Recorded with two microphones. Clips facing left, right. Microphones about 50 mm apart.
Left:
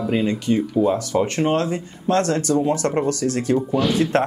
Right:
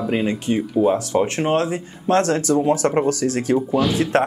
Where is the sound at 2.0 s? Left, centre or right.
Right.